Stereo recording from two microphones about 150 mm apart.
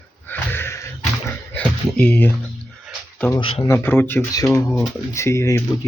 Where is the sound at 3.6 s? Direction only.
15° left (ahead or behind).